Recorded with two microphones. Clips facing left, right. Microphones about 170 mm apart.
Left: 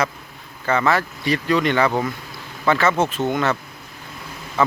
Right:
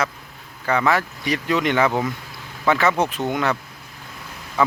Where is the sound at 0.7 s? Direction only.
15° right (ahead or behind).